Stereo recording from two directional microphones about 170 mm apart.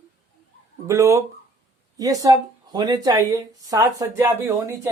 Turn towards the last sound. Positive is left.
turn(degrees=-15)  # may be behind; listen again after turning